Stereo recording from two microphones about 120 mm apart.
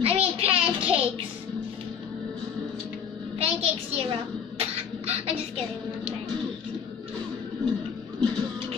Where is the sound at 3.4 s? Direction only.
55° right (ahead or behind).